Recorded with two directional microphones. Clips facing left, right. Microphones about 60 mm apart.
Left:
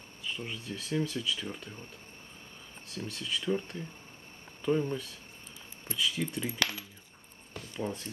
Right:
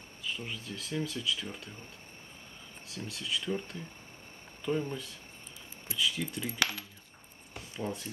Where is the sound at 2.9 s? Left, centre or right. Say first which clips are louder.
Left 1 dB; centre.